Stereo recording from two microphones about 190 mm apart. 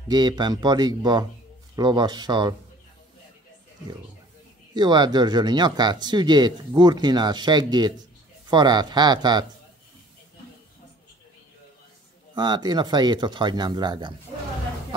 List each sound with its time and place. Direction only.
0.1 s speech: 20° right (ahead or behind)
4.7 s speech: 20° right (ahead or behind)
12.4 s speech: 20° right (ahead or behind)